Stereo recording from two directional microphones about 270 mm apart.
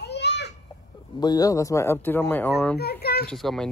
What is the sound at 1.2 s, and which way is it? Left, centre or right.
Speech, centre.